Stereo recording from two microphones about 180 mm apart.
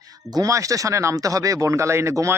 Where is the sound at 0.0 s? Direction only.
20° right (ahead or behind).